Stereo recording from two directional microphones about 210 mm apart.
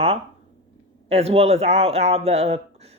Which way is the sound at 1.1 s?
30° right (ahead or behind).